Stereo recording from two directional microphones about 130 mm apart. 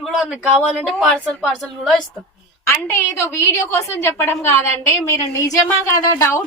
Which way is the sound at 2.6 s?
20° left (ahead or behind).